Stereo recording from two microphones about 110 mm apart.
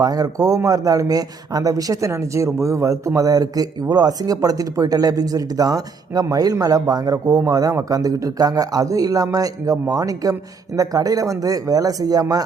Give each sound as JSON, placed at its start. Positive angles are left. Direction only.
{"t": 0.0, "sound": "a man's voice", "side_deg": -35}